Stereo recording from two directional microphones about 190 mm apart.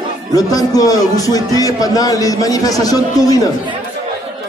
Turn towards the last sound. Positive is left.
turn(degrees=20)  # may be behind; listen again after turning